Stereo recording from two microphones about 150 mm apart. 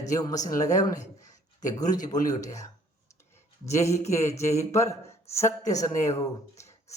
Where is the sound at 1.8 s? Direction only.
25° left (ahead or behind).